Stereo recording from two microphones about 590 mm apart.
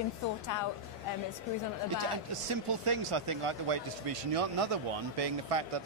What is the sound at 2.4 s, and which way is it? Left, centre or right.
A man's voice, right.